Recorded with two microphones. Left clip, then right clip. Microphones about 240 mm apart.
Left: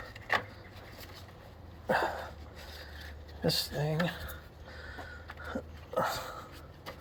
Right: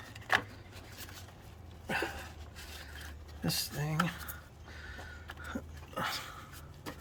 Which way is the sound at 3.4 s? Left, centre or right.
Right.